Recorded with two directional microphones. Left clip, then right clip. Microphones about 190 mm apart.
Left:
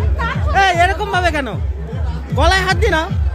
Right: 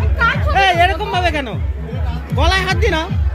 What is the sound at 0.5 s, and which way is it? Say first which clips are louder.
Music: left 2 dB; 5° left (ahead or behind).